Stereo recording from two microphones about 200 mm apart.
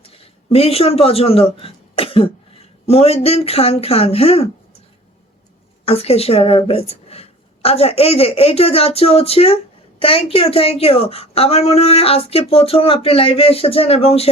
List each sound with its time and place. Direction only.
0.0 s speech: 30° left (ahead or behind)
5.8 s a woman's voice: 30° left (ahead or behind)